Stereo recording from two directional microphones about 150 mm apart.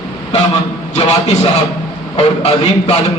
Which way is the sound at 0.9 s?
45° left (ahead or behind).